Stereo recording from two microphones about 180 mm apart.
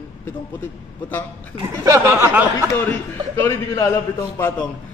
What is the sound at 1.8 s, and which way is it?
Speech, 15° right (ahead or behind).